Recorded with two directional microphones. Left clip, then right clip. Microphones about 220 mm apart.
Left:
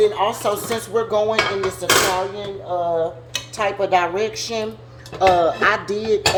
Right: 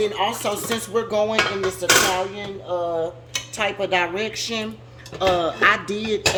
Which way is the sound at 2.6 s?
30° right (ahead or behind).